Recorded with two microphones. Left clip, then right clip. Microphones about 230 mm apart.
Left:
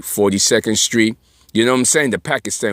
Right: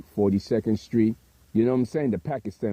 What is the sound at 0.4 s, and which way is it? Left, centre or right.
Speech, centre.